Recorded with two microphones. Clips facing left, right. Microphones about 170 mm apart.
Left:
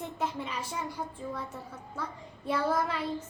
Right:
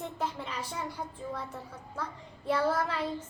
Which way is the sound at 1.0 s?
10° right (ahead or behind).